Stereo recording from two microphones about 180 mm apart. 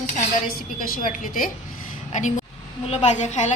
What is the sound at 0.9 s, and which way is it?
Speech, 50° left (ahead or behind).